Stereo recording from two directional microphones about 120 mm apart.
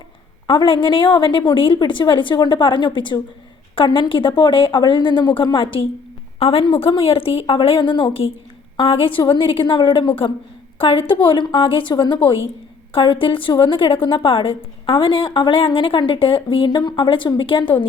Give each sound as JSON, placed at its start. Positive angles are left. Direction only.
{"t": 0.4, "sound": "a woman's voice", "side_deg": 45}